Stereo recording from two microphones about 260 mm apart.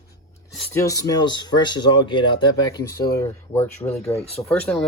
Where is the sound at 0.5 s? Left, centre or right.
Centre.